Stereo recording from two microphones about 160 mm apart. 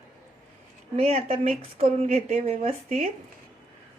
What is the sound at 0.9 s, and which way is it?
Speech, 40° right (ahead or behind).